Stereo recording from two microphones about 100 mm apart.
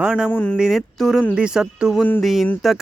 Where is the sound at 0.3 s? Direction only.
15° left (ahead or behind).